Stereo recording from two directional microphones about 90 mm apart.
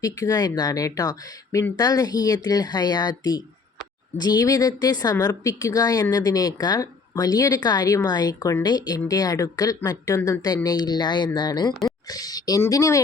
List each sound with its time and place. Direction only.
0.0 s speech: 45° left (ahead or behind)